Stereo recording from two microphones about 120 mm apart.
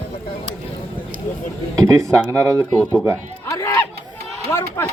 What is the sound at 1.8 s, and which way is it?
Speech, 25° right (ahead or behind).